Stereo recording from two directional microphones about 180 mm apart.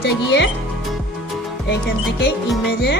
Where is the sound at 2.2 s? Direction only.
65° left (ahead or behind).